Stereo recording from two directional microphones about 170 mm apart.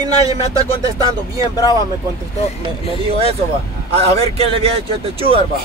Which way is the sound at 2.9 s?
35° right (ahead or behind).